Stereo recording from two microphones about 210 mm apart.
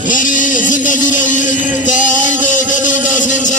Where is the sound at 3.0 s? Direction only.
40° left (ahead or behind).